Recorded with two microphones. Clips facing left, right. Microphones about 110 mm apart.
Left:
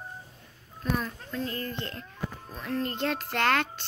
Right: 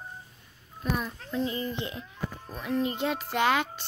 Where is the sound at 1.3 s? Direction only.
15° right (ahead or behind).